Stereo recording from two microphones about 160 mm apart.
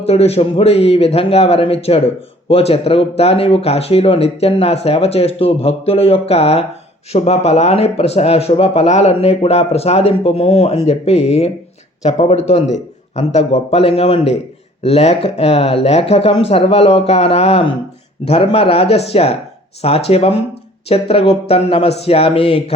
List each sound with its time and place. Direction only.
0.0 s speech: 40° left (ahead or behind)